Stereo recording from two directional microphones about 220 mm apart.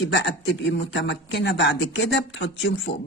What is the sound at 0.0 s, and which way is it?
Speech, 50° left (ahead or behind).